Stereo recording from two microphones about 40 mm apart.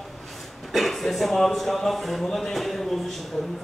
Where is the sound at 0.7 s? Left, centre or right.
Centre.